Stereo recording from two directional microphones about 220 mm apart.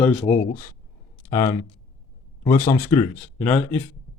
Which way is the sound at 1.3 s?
15° left (ahead or behind).